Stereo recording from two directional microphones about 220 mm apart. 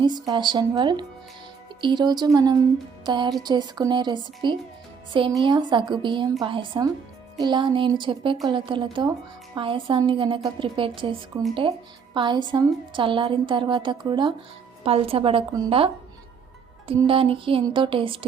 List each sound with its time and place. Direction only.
0.3 s a woman's voice: 20° right (ahead or behind)